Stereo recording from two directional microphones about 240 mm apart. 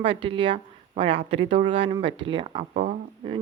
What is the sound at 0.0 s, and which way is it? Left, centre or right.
Speech, right.